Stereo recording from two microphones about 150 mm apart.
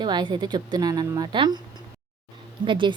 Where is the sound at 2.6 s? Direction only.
35° right (ahead or behind).